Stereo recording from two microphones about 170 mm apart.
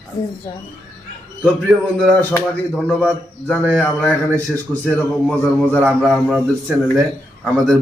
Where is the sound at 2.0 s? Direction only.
5° left (ahead or behind).